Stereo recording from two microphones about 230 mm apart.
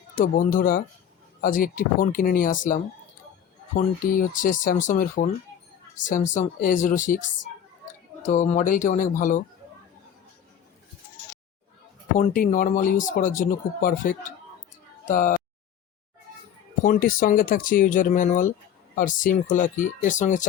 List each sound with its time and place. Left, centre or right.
0.2 s speech: left
8.3 s speech: left
12.1 s speech: left
16.8 s speech: left